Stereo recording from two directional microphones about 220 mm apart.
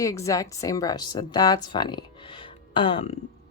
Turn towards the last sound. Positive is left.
turn(degrees=25)  # may be behind; listen again after turning